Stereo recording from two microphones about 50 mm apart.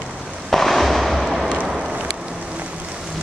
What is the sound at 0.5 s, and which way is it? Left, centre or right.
Fireworks, centre.